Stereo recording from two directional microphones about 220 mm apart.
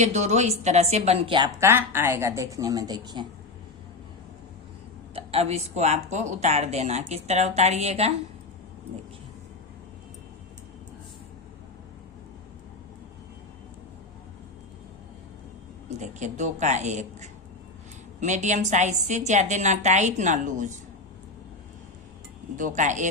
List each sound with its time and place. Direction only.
0.0 s a woman's voice: 30° right (ahead or behind)
5.1 s a woman's voice: 25° right (ahead or behind)
15.9 s a woman's voice: 30° right (ahead or behind)
22.5 s a woman's voice: 35° right (ahead or behind)